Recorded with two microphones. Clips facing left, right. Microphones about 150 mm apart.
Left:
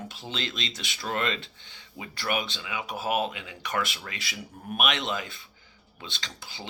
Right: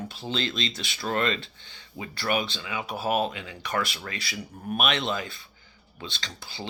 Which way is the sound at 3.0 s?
40° right (ahead or behind).